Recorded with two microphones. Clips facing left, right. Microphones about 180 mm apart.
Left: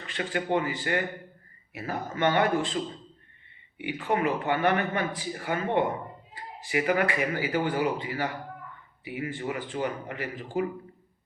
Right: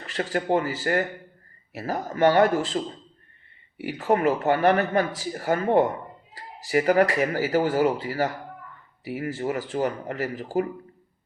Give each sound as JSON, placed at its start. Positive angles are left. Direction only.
{"t": 0.1, "sound": "speech", "side_deg": -40}